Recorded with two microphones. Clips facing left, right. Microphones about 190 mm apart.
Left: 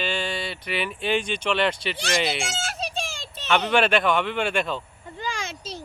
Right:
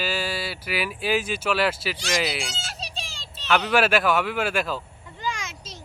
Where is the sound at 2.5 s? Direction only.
50° left (ahead or behind).